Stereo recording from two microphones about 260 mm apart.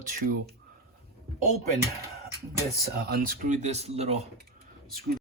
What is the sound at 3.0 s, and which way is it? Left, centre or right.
Speech, right.